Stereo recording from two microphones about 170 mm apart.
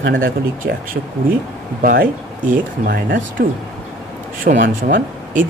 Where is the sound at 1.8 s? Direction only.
55° right (ahead or behind).